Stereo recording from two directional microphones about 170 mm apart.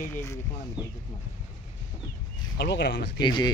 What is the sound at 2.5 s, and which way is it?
Speech, 80° left.